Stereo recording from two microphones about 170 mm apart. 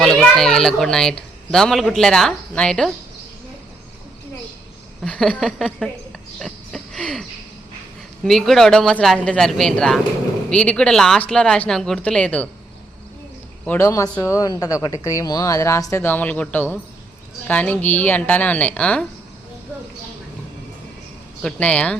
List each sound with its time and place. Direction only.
0.0 s a child's voice: centre (ahead or behind)
5.0 s a child's voice: 5° left (ahead or behind)
6.4 s a sound: 5° left (ahead or behind)
8.2 s a child's voice: centre (ahead or behind)
13.7 s a woman's voice: 15° left (ahead or behind)
21.4 s a woman's voice: 10° left (ahead or behind)